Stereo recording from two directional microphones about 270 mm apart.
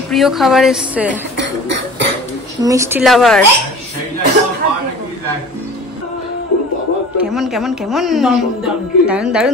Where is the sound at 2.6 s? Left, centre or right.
Centre.